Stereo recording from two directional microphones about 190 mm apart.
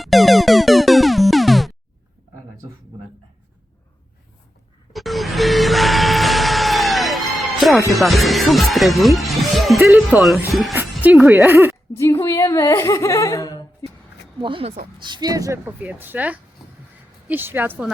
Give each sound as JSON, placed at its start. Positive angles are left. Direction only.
{"t": 0.0, "sound": "music", "side_deg": 0}
{"t": 4.9, "sound": "vehicle", "side_deg": 0}
{"t": 7.9, "sound": "speech", "side_deg": 0}
{"t": 11.9, "sound": "speech", "side_deg": 15}
{"t": 14.4, "sound": "speech", "side_deg": -25}